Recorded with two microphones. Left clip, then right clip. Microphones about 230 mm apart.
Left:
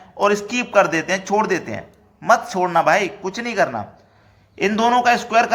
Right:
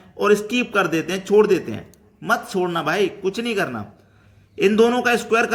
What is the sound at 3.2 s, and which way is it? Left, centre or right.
Speech, right.